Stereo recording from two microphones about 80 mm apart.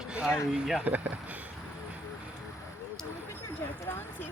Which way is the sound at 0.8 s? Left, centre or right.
Right.